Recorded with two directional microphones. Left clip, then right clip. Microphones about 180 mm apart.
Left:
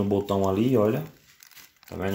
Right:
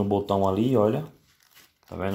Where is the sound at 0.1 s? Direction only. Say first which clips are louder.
Right 1 dB; 5° right (ahead or behind).